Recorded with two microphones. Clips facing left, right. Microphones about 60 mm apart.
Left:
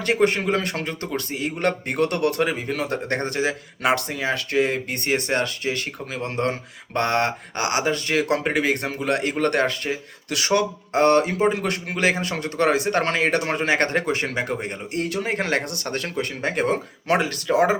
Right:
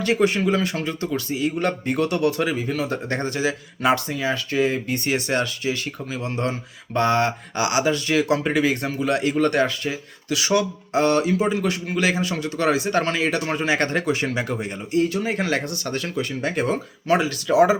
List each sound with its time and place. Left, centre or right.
0.0 s speech: left
15.0 s speech: left